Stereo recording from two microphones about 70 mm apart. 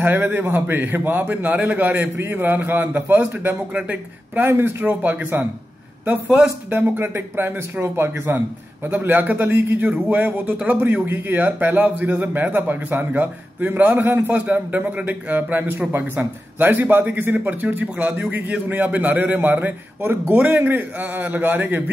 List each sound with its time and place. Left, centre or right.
0.0 s a man's voice: right
4.5 s a man's voice: right